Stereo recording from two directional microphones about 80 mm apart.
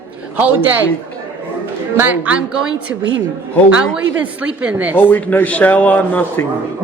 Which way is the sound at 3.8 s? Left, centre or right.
Centre.